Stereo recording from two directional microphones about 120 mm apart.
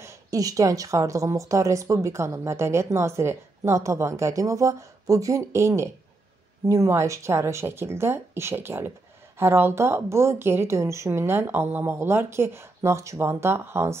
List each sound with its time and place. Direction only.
0.0 s speech: 25° right (ahead or behind)